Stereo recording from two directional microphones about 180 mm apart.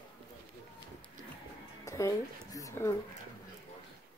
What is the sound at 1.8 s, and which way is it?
Music, 15° left (ahead or behind).